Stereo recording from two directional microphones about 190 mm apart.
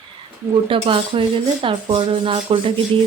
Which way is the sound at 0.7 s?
25° right (ahead or behind).